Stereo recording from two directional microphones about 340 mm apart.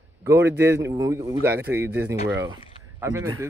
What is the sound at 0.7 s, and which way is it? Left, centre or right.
Speech, centre.